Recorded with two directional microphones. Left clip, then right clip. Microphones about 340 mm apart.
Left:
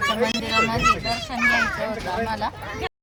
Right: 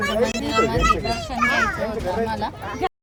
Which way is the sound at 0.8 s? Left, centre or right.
Right.